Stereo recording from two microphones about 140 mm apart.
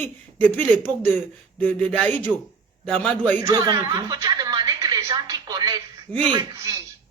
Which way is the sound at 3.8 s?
30° right (ahead or behind).